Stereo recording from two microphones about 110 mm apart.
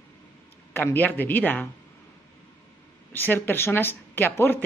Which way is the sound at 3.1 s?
20° left (ahead or behind).